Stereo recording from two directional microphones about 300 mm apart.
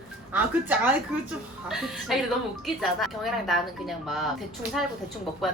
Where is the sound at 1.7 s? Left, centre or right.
Centre.